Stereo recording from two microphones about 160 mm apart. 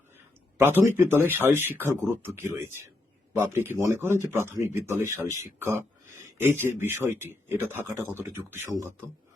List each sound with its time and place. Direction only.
0.6 s speech: 15° right (ahead or behind)